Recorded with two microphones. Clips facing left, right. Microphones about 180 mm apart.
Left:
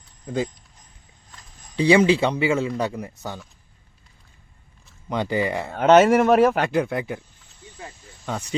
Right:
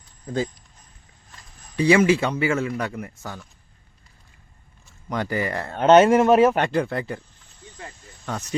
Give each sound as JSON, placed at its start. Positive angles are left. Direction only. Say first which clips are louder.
{"t": 1.7, "sound": "speech", "louder": "left 1 dB", "side_deg": 20}
{"t": 5.0, "sound": "speech", "louder": "left 2 dB", "side_deg": 15}
{"t": 7.8, "sound": "snake", "louder": "left 1 dB", "side_deg": 10}